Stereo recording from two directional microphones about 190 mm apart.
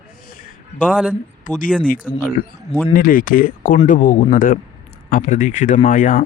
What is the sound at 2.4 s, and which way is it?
Speech, 55° left (ahead or behind).